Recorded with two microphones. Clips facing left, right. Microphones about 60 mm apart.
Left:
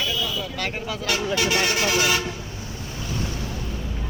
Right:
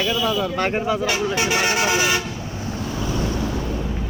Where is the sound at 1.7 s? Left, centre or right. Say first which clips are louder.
Right 3 dB; right.